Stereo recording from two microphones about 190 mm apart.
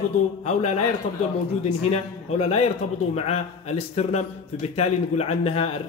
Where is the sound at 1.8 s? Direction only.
35° left (ahead or behind).